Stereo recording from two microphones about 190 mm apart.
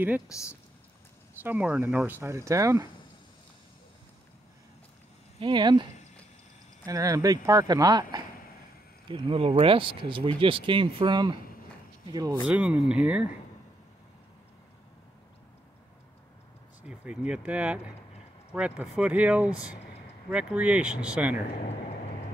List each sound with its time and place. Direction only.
0.3 s speech: 15° left (ahead or behind)
1.4 s speech: 10° right (ahead or behind)
5.4 s speech: 25° right (ahead or behind)
6.9 s speech: 15° right (ahead or behind)
12.4 s speech: 5° right (ahead or behind)
16.8 s speech: 5° right (ahead or behind)